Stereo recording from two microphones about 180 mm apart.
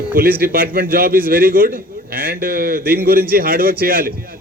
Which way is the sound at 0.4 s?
55° right (ahead or behind).